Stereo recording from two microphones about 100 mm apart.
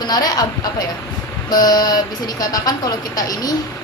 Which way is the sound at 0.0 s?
40° left (ahead or behind).